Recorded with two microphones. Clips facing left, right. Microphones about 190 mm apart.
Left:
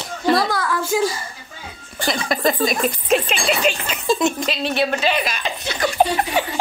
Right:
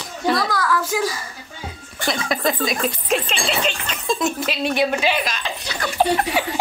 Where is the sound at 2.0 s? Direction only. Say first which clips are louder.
Left 2 dB; centre (ahead or behind).